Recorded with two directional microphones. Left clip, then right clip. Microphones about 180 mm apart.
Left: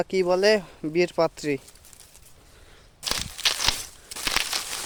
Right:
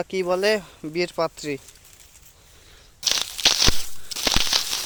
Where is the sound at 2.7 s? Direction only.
15° left (ahead or behind).